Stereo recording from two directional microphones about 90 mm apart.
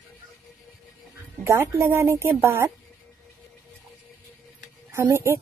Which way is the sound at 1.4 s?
30° right (ahead or behind).